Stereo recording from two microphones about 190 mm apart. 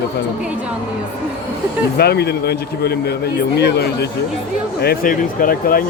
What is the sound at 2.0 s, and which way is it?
A man's voice, 60° left (ahead or behind).